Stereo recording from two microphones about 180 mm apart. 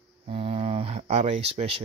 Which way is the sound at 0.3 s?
30° right (ahead or behind).